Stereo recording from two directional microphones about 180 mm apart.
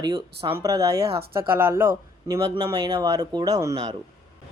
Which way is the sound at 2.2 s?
20° right (ahead or behind).